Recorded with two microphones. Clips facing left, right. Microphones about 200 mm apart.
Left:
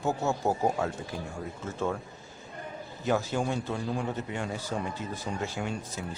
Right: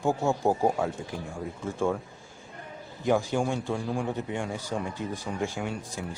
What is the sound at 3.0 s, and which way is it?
A man's voice, 15° right (ahead or behind).